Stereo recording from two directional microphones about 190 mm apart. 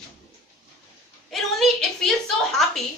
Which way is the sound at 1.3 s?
Centre (ahead or behind).